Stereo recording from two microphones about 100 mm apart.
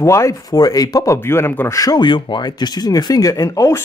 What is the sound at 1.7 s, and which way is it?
Speech, 35° left (ahead or behind).